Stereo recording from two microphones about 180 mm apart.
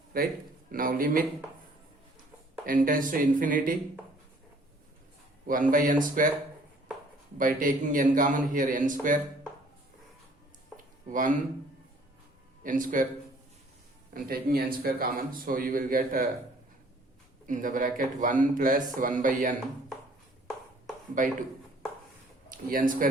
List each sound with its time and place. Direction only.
0.1 s a man's voice: 55° right (ahead or behind)
2.6 s a man's voice: 50° right (ahead or behind)
5.7 s a man's voice: 50° right (ahead or behind)
7.3 s a man's voice: 50° right (ahead or behind)
11.1 s a man's voice: 45° right (ahead or behind)
12.6 s a man's voice: 50° right (ahead or behind)
14.1 s a man's voice: 55° right (ahead or behind)
17.4 s a man's voice: 45° right (ahead or behind)
21.2 s a man's voice: 45° right (ahead or behind)
22.4 s speech: 50° right (ahead or behind)